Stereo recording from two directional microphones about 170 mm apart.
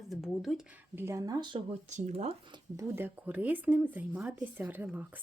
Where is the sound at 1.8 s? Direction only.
45° right (ahead or behind).